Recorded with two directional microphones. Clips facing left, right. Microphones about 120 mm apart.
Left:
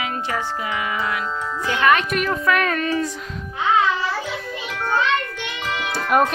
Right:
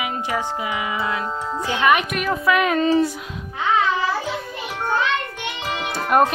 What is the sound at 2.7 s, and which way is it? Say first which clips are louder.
Speech: right 5 dB; 25° right (ahead or behind).